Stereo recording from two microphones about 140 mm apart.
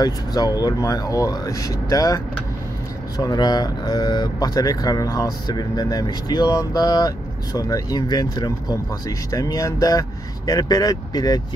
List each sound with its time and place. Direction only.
0.0 s speech: 25° left (ahead or behind)